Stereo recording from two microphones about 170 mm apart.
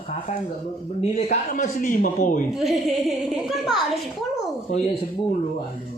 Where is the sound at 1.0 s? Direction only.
45° left (ahead or behind).